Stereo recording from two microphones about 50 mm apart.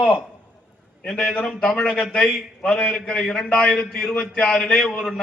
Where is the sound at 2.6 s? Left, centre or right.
Left.